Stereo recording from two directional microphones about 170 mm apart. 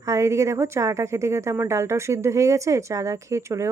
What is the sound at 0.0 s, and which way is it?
A woman's voice, 15° right (ahead or behind).